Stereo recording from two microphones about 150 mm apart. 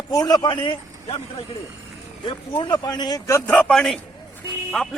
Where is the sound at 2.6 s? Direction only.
30° left (ahead or behind).